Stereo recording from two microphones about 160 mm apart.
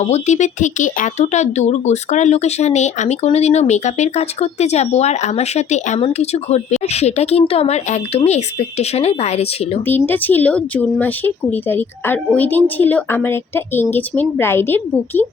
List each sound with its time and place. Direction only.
0.0 s speech: 45° left (ahead or behind)
10.1 s speech: 10° left (ahead or behind)